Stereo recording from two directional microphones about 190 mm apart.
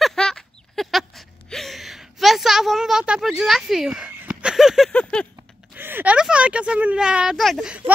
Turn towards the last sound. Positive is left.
turn(degrees=-5)  # may be behind; listen again after turning